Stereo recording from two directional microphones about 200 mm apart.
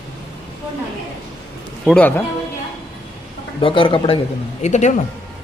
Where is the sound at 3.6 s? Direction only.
25° left (ahead or behind).